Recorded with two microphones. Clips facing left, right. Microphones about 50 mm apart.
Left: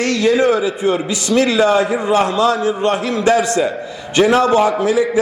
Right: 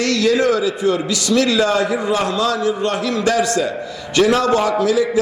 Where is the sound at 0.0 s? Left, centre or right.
Left.